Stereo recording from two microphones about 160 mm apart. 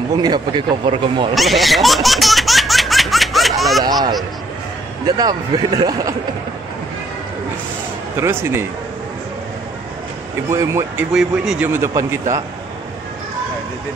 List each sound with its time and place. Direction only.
0.1 s speech: 25° right (ahead or behind)
1.3 s laughter: centre (ahead or behind)
5.0 s speech: 25° right (ahead or behind)
8.2 s a man's voice: 15° right (ahead or behind)
10.5 s a man's voice: 20° right (ahead or behind)
11.1 s a man's voice: 5° right (ahead or behind)